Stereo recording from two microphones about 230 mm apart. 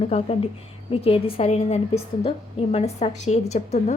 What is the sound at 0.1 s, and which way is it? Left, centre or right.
A woman's voice, left.